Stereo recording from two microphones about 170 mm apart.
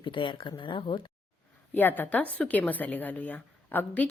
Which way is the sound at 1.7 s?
10° left (ahead or behind).